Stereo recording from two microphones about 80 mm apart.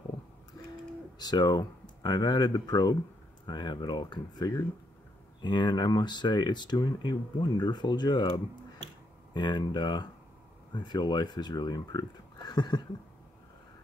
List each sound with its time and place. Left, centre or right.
1.2 s speech: left
9.3 s speech: left